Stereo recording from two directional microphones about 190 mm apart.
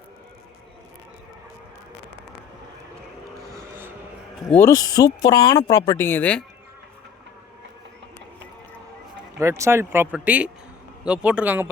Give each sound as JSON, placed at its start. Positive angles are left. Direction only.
{"t": 3.5, "sound": "vehicle", "side_deg": -10}
{"t": 4.4, "sound": "speech", "side_deg": 10}
{"t": 9.4, "sound": "speech", "side_deg": -15}